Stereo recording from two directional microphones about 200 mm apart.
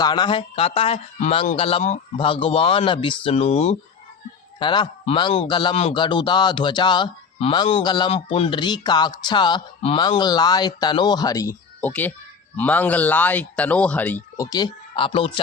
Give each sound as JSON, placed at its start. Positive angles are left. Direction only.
{"t": 0.0, "sound": "a man's voice", "side_deg": 20}